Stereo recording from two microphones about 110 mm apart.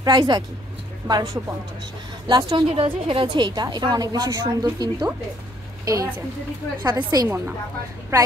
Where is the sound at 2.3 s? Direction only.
45° right (ahead or behind).